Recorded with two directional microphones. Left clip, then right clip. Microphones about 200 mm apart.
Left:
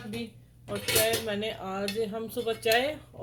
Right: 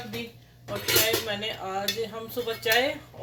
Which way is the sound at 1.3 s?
55° left (ahead or behind).